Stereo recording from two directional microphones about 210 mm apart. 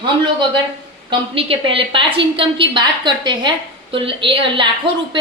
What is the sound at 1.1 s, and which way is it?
A woman's voice, 25° right (ahead or behind).